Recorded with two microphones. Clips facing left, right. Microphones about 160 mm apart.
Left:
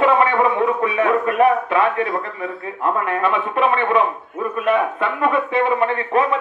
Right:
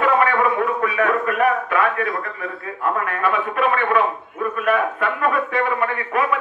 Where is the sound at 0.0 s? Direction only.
25° left (ahead or behind).